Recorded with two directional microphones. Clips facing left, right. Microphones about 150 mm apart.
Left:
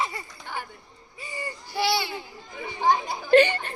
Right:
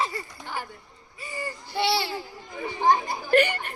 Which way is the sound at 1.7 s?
25° right (ahead or behind).